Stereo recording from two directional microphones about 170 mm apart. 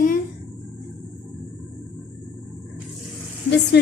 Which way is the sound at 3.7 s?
75° left (ahead or behind).